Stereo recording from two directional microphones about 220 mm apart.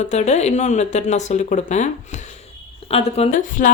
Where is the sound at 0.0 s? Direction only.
30° left (ahead or behind).